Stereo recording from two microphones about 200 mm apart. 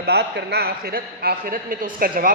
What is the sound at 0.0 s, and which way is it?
Speech, 55° right (ahead or behind).